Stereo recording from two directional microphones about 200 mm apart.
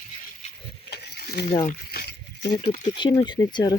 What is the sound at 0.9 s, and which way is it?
Mechanisms, 55° left (ahead or behind).